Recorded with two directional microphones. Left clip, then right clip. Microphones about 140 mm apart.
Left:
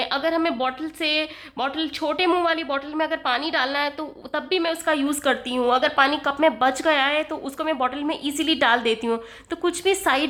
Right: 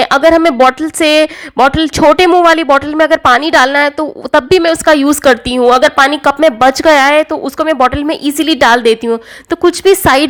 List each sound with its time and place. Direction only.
0.3 s a woman's voice: 60° right (ahead or behind)